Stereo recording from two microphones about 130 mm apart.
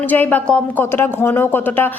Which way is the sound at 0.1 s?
15° left (ahead or behind).